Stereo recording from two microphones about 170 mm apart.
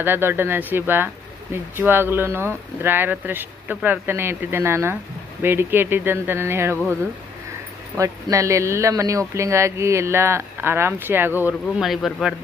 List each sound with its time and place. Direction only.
0.0 s speech: 15° right (ahead or behind)
7.9 s speech: 20° right (ahead or behind)
11.8 s speech: centre (ahead or behind)